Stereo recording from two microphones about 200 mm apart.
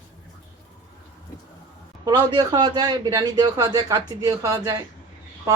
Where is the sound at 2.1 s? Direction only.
20° right (ahead or behind).